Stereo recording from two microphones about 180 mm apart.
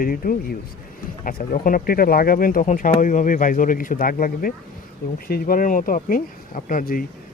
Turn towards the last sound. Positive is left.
turn(degrees=50)  # may be behind; listen again after turning